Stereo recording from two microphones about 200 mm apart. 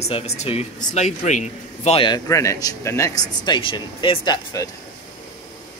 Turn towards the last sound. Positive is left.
turn(degrees=20)  # may be behind; listen again after turning